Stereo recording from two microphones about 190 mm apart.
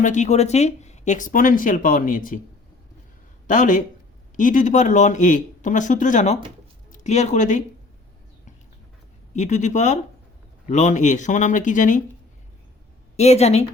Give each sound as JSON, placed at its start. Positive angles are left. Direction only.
{"t": 0.0, "sound": "speech", "side_deg": 40}
{"t": 3.4, "sound": "speech", "side_deg": 45}
{"t": 9.3, "sound": "speech", "side_deg": 40}
{"t": 13.1, "sound": "speech", "side_deg": 35}